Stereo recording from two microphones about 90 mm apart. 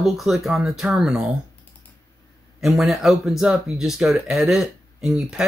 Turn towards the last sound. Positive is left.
turn(degrees=-5)  # may be behind; listen again after turning